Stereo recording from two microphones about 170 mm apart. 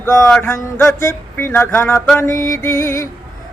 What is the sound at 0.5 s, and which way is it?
Female singing, 20° left (ahead or behind).